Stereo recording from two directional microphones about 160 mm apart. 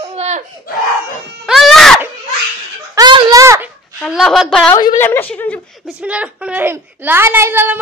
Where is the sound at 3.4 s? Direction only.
20° right (ahead or behind).